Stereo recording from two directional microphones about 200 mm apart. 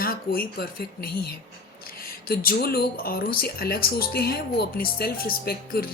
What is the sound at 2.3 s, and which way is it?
Speech, 50° left (ahead or behind).